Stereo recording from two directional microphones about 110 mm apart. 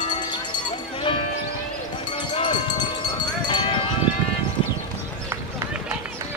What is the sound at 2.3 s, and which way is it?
Train, 45° left (ahead or behind).